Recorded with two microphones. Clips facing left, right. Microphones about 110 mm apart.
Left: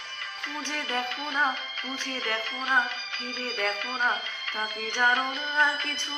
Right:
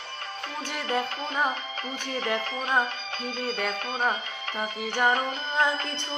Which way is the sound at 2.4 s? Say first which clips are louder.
Right 1 dB; 35° right (ahead or behind).